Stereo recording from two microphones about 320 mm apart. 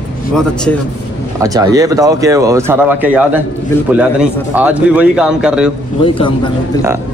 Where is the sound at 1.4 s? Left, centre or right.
Centre.